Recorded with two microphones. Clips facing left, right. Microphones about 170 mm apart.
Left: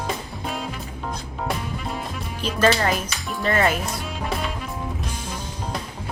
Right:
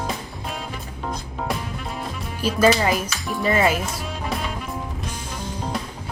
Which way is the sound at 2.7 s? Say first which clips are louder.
Even; 10° right (ahead or behind).